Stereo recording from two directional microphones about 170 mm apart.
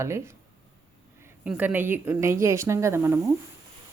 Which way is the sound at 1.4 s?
10° right (ahead or behind).